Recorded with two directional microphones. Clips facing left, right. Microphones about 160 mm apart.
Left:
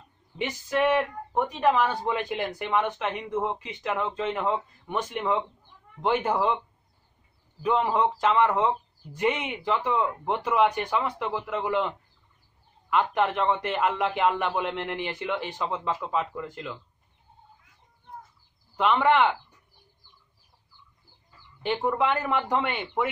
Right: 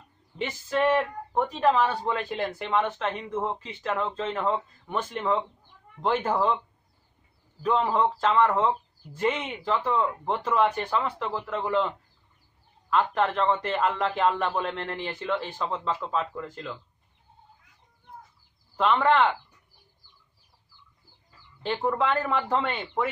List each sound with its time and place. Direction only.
0.4 s speech: 10° left (ahead or behind)
7.6 s speech: 15° left (ahead or behind)
12.9 s speech: 10° left (ahead or behind)
18.8 s speech: 10° left (ahead or behind)
21.6 s speech: 10° left (ahead or behind)